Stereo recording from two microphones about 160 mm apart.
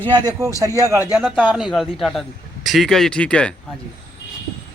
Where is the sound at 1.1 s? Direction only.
Centre (ahead or behind).